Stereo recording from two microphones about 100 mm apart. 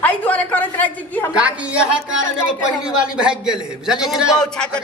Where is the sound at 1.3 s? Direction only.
10° right (ahead or behind).